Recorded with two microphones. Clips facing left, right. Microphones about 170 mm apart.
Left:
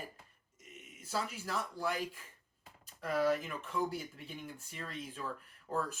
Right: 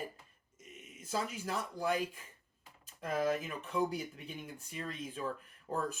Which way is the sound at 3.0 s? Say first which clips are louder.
Left 1 dB; 20° right (ahead or behind).